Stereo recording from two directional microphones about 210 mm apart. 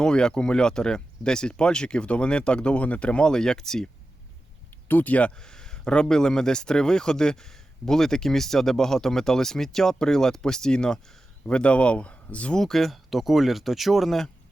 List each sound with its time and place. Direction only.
0.0 s speech: 5° left (ahead or behind)
4.9 s speech: 10° left (ahead or behind)